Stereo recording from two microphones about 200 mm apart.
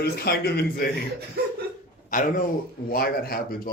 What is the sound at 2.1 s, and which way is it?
Speech, 40° left (ahead or behind).